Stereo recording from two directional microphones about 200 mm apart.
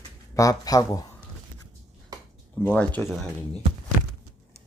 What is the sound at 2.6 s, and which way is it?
Speech, 5° left (ahead or behind).